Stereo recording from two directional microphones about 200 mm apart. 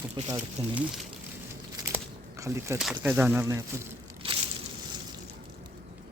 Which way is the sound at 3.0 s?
5° right (ahead or behind).